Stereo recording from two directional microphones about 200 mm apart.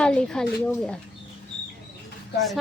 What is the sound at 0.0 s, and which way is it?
Speech, 5° left (ahead or behind).